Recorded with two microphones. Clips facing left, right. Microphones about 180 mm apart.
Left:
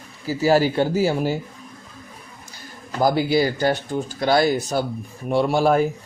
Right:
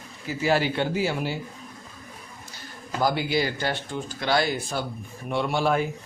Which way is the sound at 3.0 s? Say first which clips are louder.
Left 6 dB; 40° left (ahead or behind).